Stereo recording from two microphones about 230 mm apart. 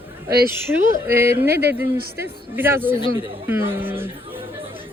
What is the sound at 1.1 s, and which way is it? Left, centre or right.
A woman's voice, centre.